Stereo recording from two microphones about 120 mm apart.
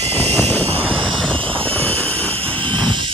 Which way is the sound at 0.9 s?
45° right (ahead or behind).